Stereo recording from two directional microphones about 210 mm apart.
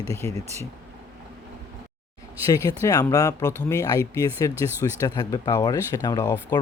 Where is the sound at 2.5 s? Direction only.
15° left (ahead or behind).